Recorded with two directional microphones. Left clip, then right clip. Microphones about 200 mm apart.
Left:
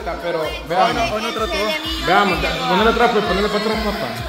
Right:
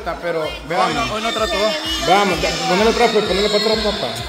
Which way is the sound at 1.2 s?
55° right (ahead or behind).